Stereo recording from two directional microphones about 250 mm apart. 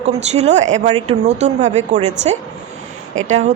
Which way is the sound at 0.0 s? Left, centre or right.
Right.